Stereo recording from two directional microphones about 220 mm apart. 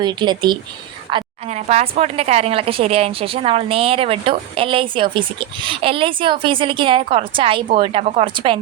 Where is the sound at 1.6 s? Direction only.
25° right (ahead or behind).